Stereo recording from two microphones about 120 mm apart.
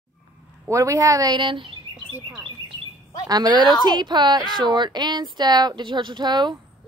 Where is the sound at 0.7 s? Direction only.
25° right (ahead or behind); by 1.8 s 45° right (ahead or behind).